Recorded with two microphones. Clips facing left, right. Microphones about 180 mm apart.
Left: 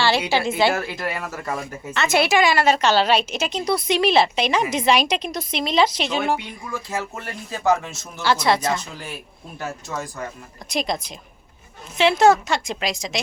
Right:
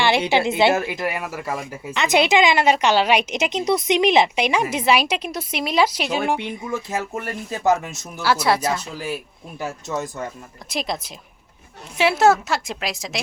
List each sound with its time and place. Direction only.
0.0 s speech: 20° right (ahead or behind)
6.4 s speech: 20° right (ahead or behind); by 9.1 s 5° right (ahead or behind)
9.6 s speech: 20° right (ahead or behind)
10.7 s a woman's voice: 5° right (ahead or behind)